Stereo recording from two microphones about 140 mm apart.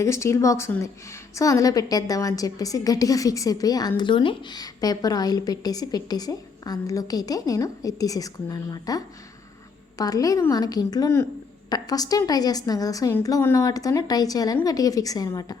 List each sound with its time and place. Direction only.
0.0 s a woman's voice: 20° left (ahead or behind)